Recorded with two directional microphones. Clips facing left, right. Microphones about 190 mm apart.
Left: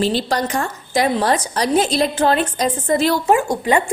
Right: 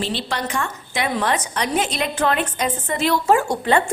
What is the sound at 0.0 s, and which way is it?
A woman's voice, 40° left (ahead or behind).